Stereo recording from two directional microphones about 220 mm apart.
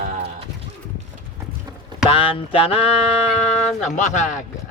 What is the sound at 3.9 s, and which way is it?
Speech, 30° left (ahead or behind).